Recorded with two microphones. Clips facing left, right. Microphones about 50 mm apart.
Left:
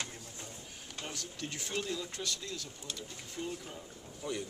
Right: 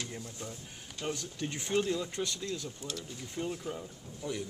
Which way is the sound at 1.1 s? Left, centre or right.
Right.